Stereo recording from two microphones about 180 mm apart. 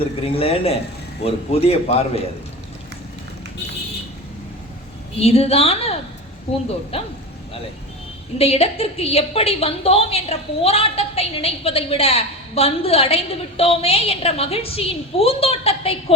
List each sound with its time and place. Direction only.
0.0 s a woman's voice: 30° left (ahead or behind)
5.1 s a woman's voice: 35° left (ahead or behind)
8.4 s a woman's voice: 35° left (ahead or behind)